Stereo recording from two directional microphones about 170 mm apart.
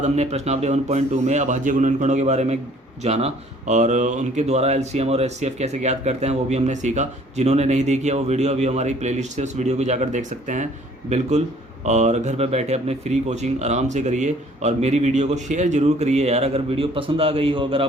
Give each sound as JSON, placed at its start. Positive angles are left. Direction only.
{"t": 0.0, "sound": "a man's voice", "side_deg": -40}